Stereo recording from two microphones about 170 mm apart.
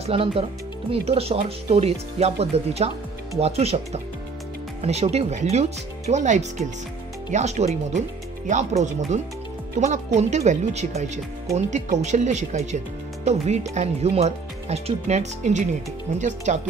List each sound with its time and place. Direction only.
0.0 s speech: 35° right (ahead or behind)